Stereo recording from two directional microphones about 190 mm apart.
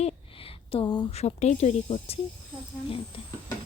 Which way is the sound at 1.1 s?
35° left (ahead or behind).